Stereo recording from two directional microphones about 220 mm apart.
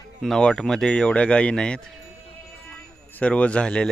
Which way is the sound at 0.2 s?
Centre (ahead or behind).